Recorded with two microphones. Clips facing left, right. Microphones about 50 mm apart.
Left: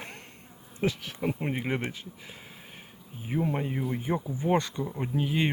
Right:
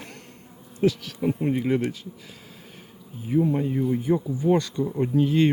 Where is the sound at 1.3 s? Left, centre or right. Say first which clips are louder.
Right 7 dB; left.